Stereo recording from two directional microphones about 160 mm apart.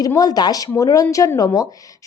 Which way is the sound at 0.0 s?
25° left (ahead or behind).